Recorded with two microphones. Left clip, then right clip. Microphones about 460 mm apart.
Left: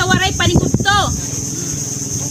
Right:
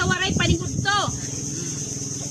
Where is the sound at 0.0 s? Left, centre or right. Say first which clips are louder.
Left 7 dB; right.